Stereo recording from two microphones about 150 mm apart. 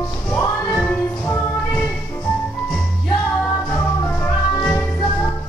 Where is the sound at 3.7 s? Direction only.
15° left (ahead or behind).